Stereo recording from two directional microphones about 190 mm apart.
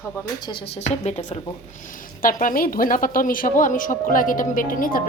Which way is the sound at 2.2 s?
45° left (ahead or behind).